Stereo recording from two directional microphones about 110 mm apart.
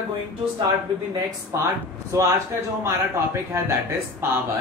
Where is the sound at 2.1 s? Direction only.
25° right (ahead or behind).